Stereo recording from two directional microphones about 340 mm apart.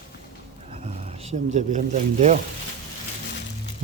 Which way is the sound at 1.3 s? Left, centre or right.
Right.